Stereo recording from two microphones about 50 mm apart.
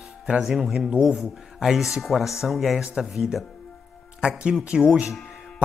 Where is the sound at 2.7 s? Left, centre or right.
Centre.